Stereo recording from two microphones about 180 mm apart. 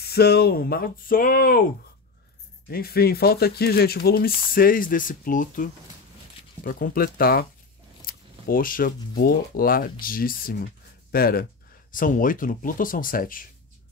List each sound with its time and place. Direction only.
0.0 s speech: 60° left (ahead or behind)
2.7 s speech: 60° left (ahead or behind)